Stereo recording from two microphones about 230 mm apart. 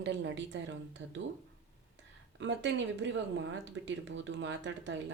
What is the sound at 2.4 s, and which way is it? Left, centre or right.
Speech, right.